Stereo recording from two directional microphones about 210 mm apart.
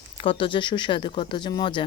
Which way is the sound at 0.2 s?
25° left (ahead or behind).